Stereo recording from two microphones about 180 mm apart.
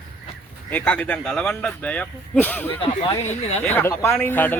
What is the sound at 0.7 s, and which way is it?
Speech, 5° left (ahead or behind).